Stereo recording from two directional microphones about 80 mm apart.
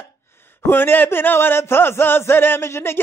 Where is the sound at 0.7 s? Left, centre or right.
Left.